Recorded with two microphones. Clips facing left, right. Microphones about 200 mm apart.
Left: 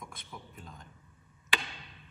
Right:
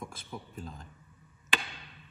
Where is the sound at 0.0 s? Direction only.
30° right (ahead or behind).